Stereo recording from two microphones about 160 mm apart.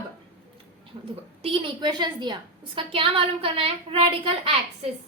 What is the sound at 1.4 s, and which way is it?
A woman's voice, 35° right (ahead or behind).